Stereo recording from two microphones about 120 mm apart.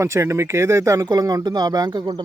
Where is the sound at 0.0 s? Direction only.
25° right (ahead or behind).